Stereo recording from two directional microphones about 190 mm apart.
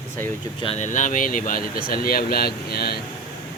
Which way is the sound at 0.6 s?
35° left (ahead or behind).